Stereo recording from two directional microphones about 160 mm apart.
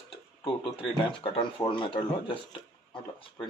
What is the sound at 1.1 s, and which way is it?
Speech, 30° left (ahead or behind).